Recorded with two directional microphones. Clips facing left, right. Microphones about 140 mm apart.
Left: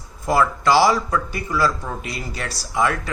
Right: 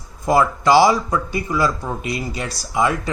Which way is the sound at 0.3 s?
20° right (ahead or behind).